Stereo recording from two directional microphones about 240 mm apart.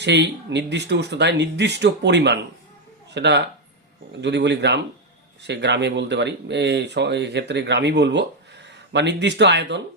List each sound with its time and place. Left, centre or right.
0.0 s speech: right